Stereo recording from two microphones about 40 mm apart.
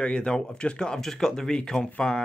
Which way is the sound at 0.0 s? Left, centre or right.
Left.